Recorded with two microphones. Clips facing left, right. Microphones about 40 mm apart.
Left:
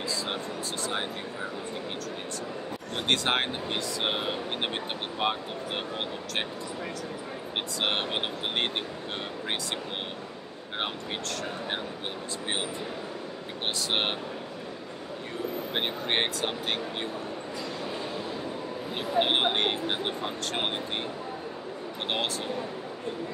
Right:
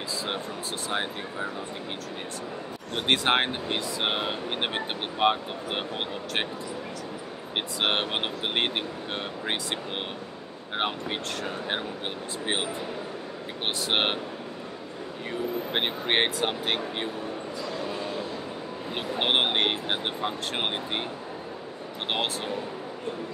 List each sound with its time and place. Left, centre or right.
3.1 s speech: right
7.5 s speech: right
13.8 s speech: right
15.7 s speech: right
18.9 s speech: right